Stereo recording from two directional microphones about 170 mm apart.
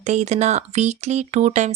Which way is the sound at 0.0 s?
45° right (ahead or behind).